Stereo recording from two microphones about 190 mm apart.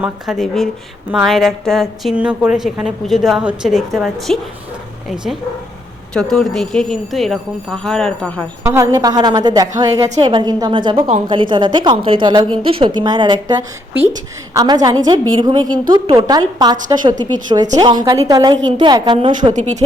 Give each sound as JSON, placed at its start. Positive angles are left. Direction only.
{"t": 0.0, "sound": "a woman's voice", "side_deg": 0}
{"t": 8.6, "sound": "a woman's voice", "side_deg": -15}
{"t": 19.5, "sound": "speech", "side_deg": -40}